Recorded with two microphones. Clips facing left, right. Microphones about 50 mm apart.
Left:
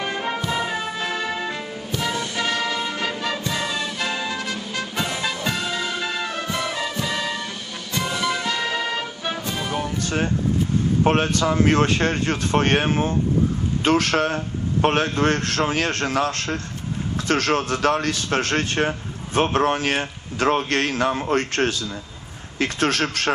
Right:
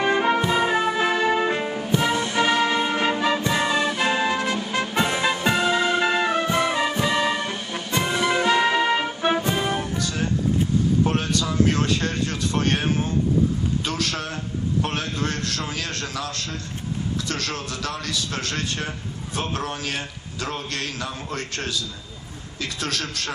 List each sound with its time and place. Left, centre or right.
0.0 s music: right
10.0 s music: left
11.0 s a man's voice: left